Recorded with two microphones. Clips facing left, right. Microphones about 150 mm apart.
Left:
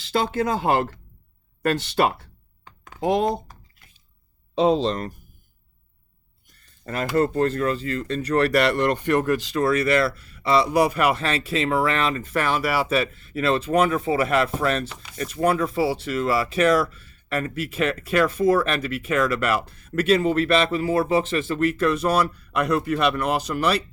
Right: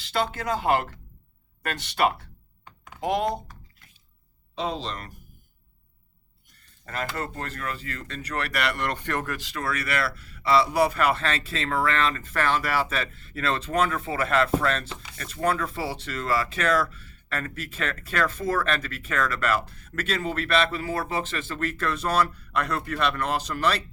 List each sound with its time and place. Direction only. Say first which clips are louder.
0.3 s speech: left 3 dB; 30° left (ahead or behind)
7.2 s speech: left 13 dB; 30° left (ahead or behind); by 23.8 s 10° left (ahead or behind)